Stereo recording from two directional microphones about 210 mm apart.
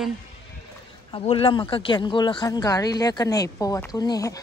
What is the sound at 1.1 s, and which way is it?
Speech, 25° left (ahead or behind).